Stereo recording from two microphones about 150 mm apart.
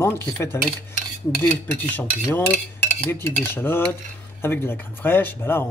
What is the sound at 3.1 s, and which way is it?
Speech, 15° left (ahead or behind).